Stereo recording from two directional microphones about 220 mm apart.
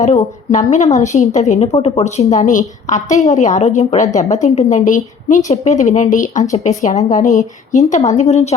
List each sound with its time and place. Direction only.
0.0 s a woman's voice: 30° left (ahead or behind)